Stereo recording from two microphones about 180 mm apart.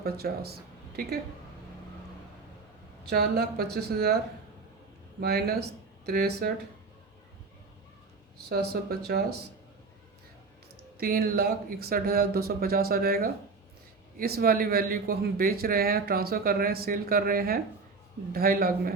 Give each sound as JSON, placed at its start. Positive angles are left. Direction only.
{"t": 0.0, "sound": "speech", "side_deg": -60}
{"t": 3.1, "sound": "speech", "side_deg": -60}
{"t": 5.2, "sound": "speech", "side_deg": -60}
{"t": 8.4, "sound": "speech", "side_deg": -60}
{"t": 10.9, "sound": "speech", "side_deg": -55}